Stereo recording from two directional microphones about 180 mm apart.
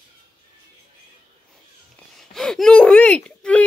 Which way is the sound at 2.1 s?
Centre (ahead or behind).